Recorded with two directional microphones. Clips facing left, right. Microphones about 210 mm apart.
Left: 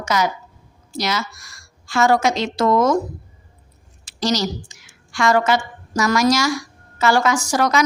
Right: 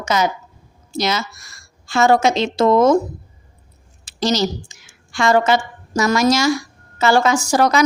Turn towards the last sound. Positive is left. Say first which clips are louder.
# right 3 dB
turn(degrees=-30)  # may be behind; listen again after turning